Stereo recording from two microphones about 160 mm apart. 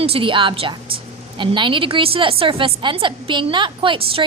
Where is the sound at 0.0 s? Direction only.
35° right (ahead or behind).